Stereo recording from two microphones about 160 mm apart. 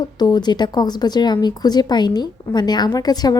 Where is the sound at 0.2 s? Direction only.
25° left (ahead or behind).